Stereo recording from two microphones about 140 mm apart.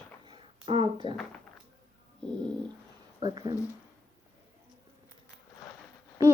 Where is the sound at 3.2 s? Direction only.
25° right (ahead or behind).